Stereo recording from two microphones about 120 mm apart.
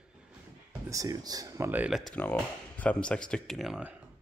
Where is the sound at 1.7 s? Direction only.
15° right (ahead or behind).